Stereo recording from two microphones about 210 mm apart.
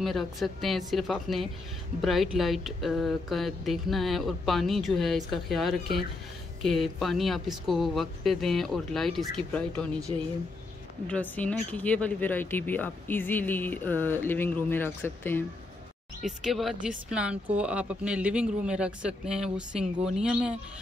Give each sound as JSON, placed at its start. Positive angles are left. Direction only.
{"t": 0.0, "sound": "speech", "side_deg": 0}
{"t": 11.1, "sound": "speech", "side_deg": 5}
{"t": 16.3, "sound": "speech", "side_deg": 0}